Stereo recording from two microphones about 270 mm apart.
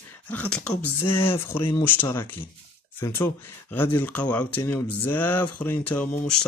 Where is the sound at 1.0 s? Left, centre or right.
Left.